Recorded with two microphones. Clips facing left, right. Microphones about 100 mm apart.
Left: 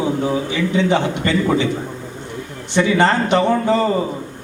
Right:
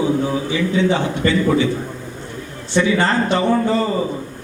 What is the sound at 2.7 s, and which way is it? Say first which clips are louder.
Speech: left 1 dB; 20° left (ahead or behind).